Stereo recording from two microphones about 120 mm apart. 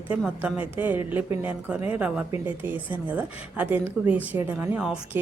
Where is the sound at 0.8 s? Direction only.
15° right (ahead or behind).